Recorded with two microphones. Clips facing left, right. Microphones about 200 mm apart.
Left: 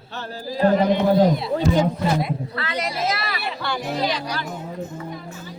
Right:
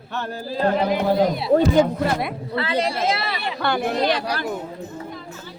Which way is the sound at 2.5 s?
30° right (ahead or behind).